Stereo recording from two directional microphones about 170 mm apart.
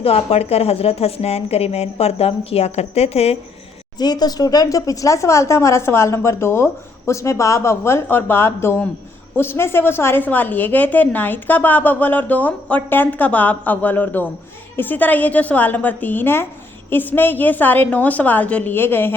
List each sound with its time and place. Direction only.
0.0 s a woman's voice: 35° left (ahead or behind)
3.9 s speech: 25° left (ahead or behind)